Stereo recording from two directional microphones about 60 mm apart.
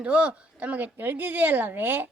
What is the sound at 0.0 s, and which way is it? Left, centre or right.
Speech, centre.